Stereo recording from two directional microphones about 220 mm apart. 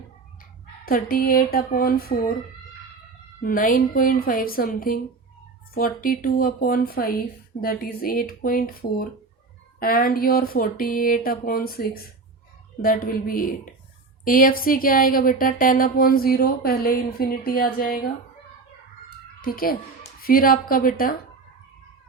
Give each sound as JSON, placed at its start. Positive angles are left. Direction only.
{"t": 0.9, "sound": "speech", "side_deg": 40}
{"t": 3.4, "sound": "speech", "side_deg": 40}
{"t": 19.4, "sound": "a child's voice", "side_deg": 40}